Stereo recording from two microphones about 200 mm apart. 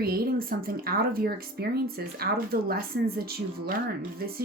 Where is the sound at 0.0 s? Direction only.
50° right (ahead or behind).